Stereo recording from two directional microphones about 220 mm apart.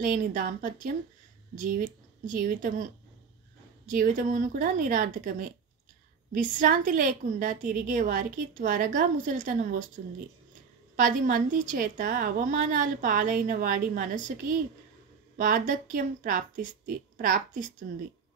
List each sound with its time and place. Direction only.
0.0 s a woman's voice: 35° right (ahead or behind)
3.9 s a woman's voice: 35° right (ahead or behind)
11.0 s a woman's voice: 35° right (ahead or behind)